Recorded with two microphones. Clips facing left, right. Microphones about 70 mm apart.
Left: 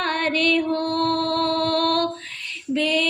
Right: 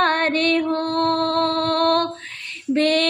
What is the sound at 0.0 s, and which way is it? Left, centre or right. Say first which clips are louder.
Music: right 3 dB; right.